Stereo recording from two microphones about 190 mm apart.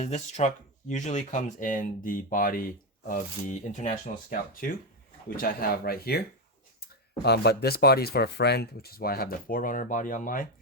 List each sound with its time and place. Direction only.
0.0 s speech: 35° left (ahead or behind); by 6.2 s 55° left (ahead or behind)
7.3 s speech: 60° left (ahead or behind); by 10.4 s 45° left (ahead or behind)